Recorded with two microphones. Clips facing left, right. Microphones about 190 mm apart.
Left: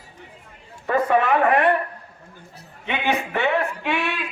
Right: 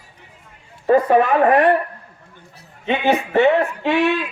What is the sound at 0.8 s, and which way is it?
Speech, 30° right (ahead or behind).